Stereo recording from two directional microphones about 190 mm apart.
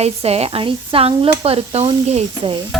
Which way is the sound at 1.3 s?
30° right (ahead or behind).